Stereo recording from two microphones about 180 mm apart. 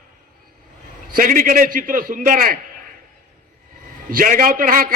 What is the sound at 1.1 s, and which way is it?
A man's voice, 50° right (ahead or behind).